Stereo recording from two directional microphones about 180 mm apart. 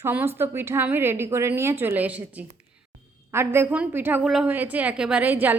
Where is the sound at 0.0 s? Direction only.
10° right (ahead or behind).